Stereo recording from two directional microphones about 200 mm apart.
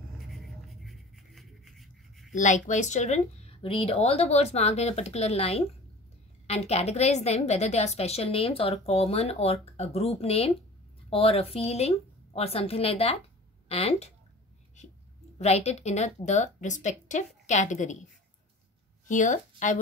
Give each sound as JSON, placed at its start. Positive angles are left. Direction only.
{"t": 0.3, "sound": "a sound", "side_deg": 0}
{"t": 2.3, "sound": "a woman's voice", "side_deg": 40}
{"t": 15.3, "sound": "speech", "side_deg": 30}
{"t": 19.0, "sound": "speech", "side_deg": 40}